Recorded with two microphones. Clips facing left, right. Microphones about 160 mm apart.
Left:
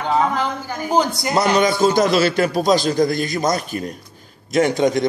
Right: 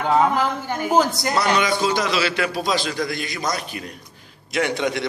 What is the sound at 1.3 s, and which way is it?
A man's voice, 45° left (ahead or behind).